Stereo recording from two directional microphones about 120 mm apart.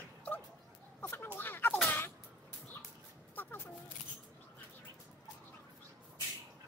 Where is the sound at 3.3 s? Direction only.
15° left (ahead or behind).